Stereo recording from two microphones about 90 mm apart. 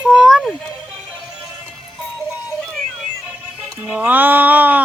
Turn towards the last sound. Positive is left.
turn(degrees=-20)  # may be behind; listen again after turning